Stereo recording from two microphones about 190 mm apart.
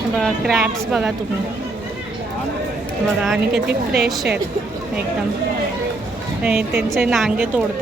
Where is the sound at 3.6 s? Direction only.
55° right (ahead or behind).